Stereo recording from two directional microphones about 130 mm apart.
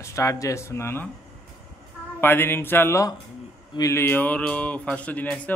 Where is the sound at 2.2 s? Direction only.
15° left (ahead or behind).